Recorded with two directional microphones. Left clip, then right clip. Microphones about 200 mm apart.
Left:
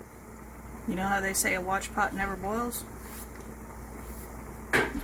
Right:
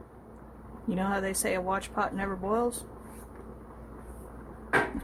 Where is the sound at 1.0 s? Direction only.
40° right (ahead or behind).